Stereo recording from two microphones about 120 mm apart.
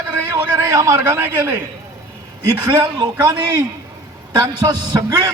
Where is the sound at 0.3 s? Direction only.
30° right (ahead or behind).